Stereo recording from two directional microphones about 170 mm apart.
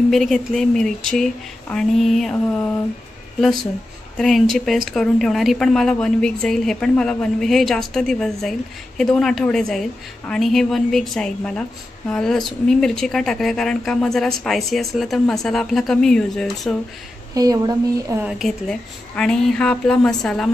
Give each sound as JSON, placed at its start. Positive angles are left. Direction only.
{"t": 0.1, "sound": "speech", "side_deg": 0}
{"t": 4.2, "sound": "speech", "side_deg": 0}
{"t": 17.3, "sound": "speech", "side_deg": -20}
{"t": 18.2, "sound": "speech", "side_deg": 0}